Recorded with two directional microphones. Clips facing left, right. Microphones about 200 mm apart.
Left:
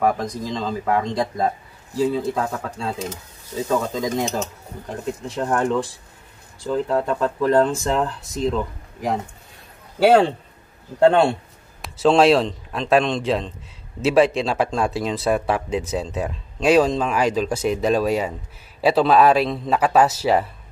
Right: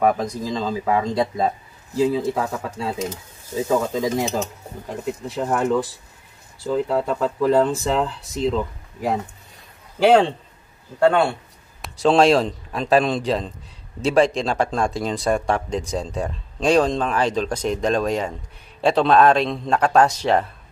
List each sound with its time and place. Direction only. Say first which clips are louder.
0.0 s speech: right 1 dB; 5° right (ahead or behind)
10.0 s speech: even; 5° left (ahead or behind)
11.0 s a man's voice: left 2 dB; 25° left (ahead or behind)
11.8 s speech: left 1 dB; centre (ahead or behind)